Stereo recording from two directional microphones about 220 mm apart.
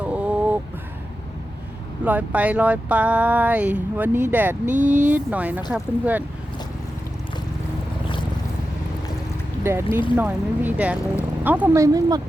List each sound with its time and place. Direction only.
0.0 s a sound: 5° right (ahead or behind)
2.0 s speech: 5° right (ahead or behind)
4.6 s speech: 35° right (ahead or behind)
5.0 s speech: 5° right (ahead or behind)
9.6 s speech: 10° right (ahead or behind)